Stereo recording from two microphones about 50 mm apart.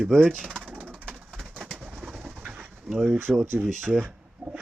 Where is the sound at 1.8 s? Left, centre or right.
Centre.